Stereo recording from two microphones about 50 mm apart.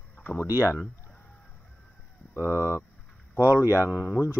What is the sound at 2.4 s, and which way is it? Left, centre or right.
Speech, left.